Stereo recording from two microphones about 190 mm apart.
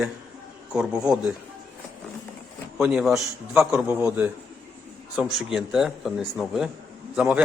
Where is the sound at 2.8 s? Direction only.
Centre (ahead or behind).